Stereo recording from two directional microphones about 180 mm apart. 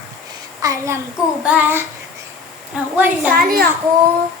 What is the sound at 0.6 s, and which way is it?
A child's voice, 15° right (ahead or behind).